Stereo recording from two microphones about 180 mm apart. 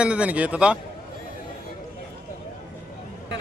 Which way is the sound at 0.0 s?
5° right (ahead or behind).